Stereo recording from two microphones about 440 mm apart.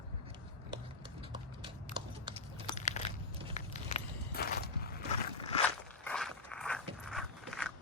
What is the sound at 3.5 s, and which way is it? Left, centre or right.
Walk, centre.